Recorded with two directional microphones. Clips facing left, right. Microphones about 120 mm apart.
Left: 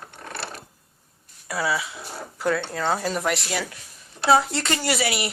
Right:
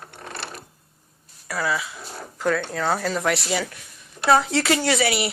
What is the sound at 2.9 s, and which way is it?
Speech, 15° left (ahead or behind).